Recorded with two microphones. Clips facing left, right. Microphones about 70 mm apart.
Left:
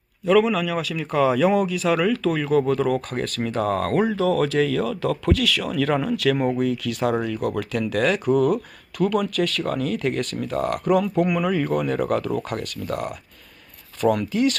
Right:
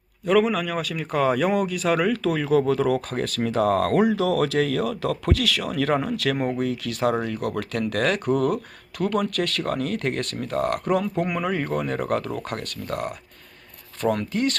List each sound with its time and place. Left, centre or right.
0.3 s speech: right
2.1 s speech: right
4.1 s speech: right